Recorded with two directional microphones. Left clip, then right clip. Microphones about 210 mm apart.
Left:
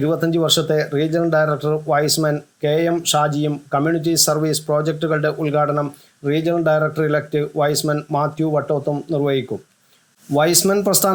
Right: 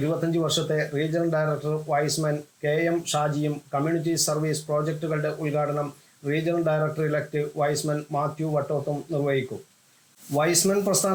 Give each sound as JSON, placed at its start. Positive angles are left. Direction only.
{"t": 0.0, "sound": "speech", "side_deg": 25}